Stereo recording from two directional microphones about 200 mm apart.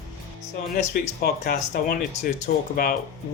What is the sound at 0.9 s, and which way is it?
Speech, 50° left (ahead or behind).